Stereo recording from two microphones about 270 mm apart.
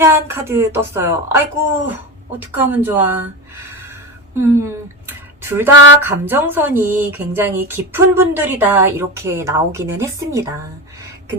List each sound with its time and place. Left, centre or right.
0.0 s speech: centre
4.4 s speech: centre
5.7 s a sound: left
6.0 s speech: centre